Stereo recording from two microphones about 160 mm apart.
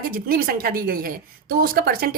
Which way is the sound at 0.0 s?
65° right (ahead or behind).